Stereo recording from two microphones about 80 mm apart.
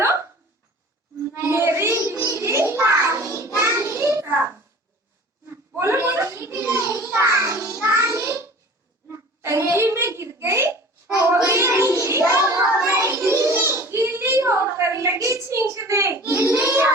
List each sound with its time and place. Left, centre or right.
0.0 s hiccup: right
1.3 s child singing: right
5.5 s a child's voice: right
7.2 s child singing: right
9.0 s a child's voice: right
11.4 s child singing: right
13.9 s a woman's voice: right
16.3 s child singing: right